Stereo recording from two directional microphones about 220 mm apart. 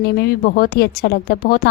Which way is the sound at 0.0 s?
45° left (ahead or behind).